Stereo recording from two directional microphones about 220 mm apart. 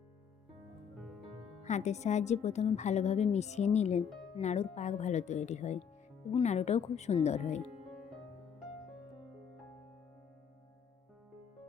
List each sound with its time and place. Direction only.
1.6 s a woman's voice: 30° left (ahead or behind)